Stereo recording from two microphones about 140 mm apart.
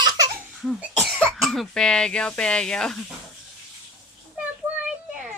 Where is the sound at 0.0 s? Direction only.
30° right (ahead or behind).